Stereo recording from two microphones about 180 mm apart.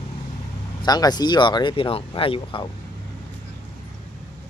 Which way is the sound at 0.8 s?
20° left (ahead or behind).